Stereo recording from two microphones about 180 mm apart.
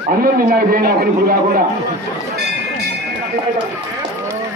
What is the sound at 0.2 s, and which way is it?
Speech, 50° right (ahead or behind).